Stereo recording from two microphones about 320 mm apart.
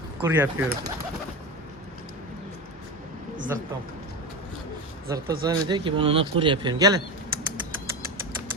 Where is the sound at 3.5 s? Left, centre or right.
Centre.